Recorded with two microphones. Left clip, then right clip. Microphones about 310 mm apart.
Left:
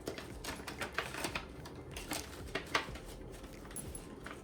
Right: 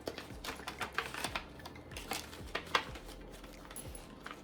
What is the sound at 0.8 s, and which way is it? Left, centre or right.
Typing, centre.